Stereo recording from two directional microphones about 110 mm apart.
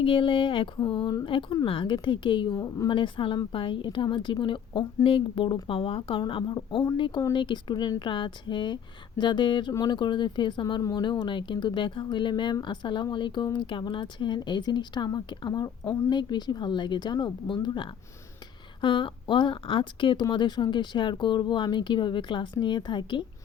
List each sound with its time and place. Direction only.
0.0 s speech: 50° left (ahead or behind)
2.6 s speech: 35° left (ahead or behind)